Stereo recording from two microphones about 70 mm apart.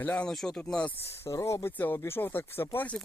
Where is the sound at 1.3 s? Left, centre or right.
Left.